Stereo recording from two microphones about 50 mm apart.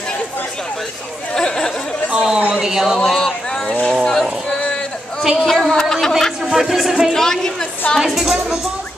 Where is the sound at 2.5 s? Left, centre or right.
Centre.